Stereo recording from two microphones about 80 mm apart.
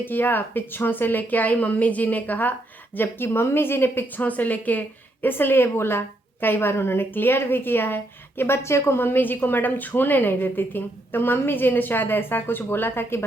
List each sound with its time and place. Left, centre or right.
0.0 s a woman's voice: left